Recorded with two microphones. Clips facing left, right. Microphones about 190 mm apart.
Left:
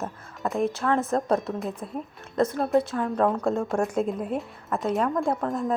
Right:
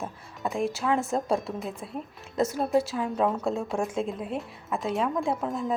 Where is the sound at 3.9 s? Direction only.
45° left (ahead or behind).